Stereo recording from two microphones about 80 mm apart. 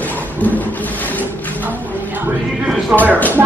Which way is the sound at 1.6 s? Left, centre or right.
Right.